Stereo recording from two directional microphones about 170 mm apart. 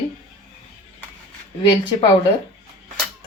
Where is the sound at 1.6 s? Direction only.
30° left (ahead or behind).